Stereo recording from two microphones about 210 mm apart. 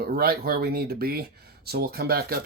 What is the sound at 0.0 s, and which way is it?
Speech, 45° right (ahead or behind).